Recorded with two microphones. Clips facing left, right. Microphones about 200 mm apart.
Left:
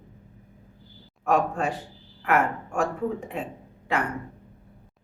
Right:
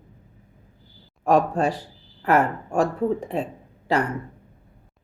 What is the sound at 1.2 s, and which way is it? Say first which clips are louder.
Speech: right 4 dB; 35° right (ahead or behind).